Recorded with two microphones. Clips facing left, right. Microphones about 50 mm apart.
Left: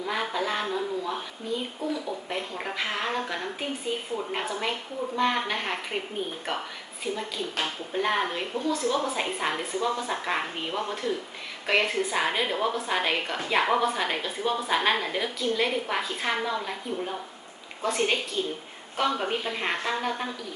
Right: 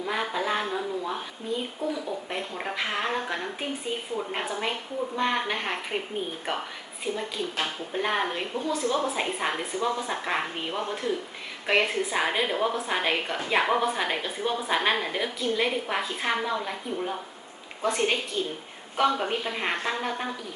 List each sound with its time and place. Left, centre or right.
0.0 s a woman's voice: centre
6.5 s a woman's voice: centre
8.6 s a woman's voice: right
9.1 s a woman's voice: centre
17.8 s a woman's voice: centre